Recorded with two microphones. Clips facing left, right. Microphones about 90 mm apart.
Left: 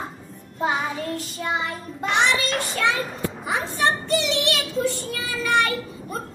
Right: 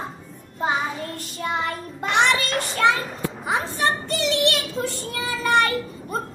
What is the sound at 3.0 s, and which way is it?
Speech, 35° right (ahead or behind).